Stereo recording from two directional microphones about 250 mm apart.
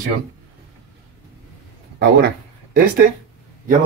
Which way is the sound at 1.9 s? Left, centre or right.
Right.